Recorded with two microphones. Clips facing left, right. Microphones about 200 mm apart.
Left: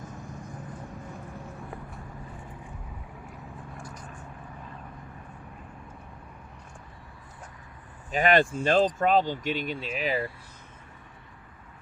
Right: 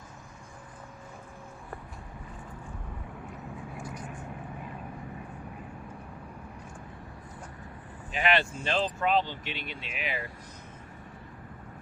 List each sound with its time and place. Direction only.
8.1 s speech: 45° left (ahead or behind)